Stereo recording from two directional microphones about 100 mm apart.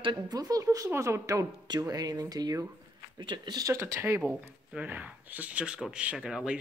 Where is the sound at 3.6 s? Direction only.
25° right (ahead or behind).